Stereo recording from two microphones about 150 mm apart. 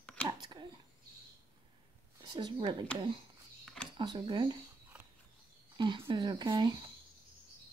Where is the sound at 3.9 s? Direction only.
30° right (ahead or behind).